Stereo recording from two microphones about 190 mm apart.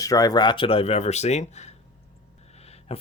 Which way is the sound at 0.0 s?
20° left (ahead or behind).